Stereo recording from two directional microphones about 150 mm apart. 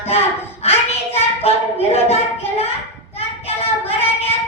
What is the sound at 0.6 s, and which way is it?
Child singing, 45° left (ahead or behind).